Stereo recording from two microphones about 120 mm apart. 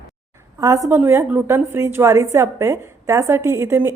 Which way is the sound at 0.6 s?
25° right (ahead or behind).